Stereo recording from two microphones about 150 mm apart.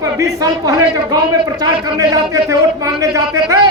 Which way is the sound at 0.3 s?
25° right (ahead or behind).